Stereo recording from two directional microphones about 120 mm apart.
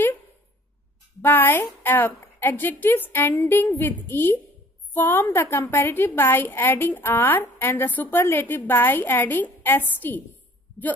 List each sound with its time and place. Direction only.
1.2 s a woman's voice: 15° left (ahead or behind)